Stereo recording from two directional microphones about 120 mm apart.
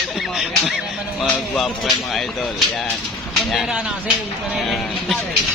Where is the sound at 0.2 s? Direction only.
5° right (ahead or behind).